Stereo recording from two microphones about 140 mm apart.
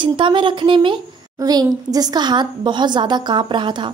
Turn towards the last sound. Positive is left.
turn(degrees=-35)  # may be behind; listen again after turning